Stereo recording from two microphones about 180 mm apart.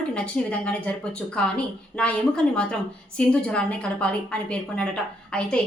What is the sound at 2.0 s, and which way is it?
A woman's voice, 5° left (ahead or behind).